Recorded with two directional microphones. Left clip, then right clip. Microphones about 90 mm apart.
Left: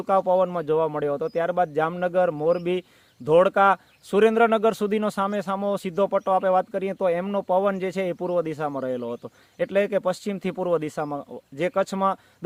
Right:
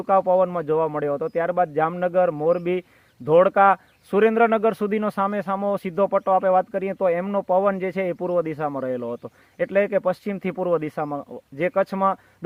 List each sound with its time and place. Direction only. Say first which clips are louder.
0.1 s speech: right 2 dB; 30° left (ahead or behind)